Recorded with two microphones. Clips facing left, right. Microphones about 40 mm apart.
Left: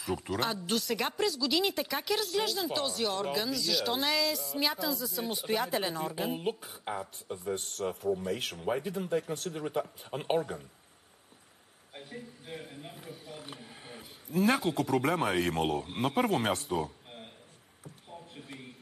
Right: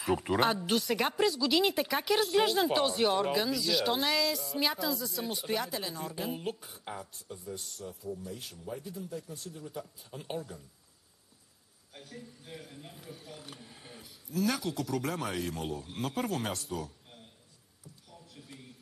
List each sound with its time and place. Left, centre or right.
0.0 s speech: centre
0.7 s speech: centre
5.7 s speech: left
6.0 s speech: centre
7.2 s speech: left
7.8 s speech: left
9.8 s speech: left
11.9 s a man's voice: left
13.1 s a sound: centre
13.4 s a sound: centre
15.4 s speech: left
15.8 s speech: left
17.8 s a sound: left